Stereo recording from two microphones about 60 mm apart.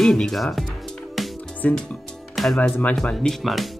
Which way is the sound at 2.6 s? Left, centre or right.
Left.